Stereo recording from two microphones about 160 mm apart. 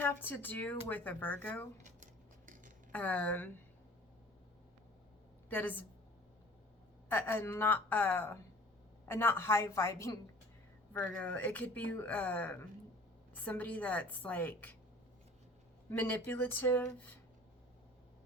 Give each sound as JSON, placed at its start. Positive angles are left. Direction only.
{"t": 0.0, "sound": "speech", "side_deg": 10}
{"t": 2.9, "sound": "speech", "side_deg": 10}
{"t": 5.5, "sound": "speech", "side_deg": 10}
{"t": 7.1, "sound": "speech", "side_deg": 15}
{"t": 15.9, "sound": "speech", "side_deg": 10}